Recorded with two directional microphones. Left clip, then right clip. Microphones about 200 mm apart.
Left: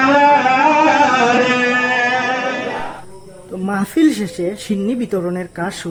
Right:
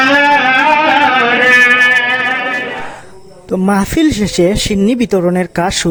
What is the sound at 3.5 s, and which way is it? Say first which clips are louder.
Speech: right 6 dB; 40° right (ahead or behind).